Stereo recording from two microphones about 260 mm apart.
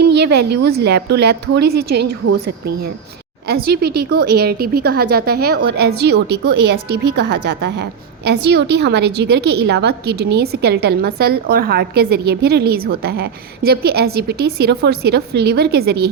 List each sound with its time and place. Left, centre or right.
0.0 s a woman's voice: right
3.4 s a woman's voice: right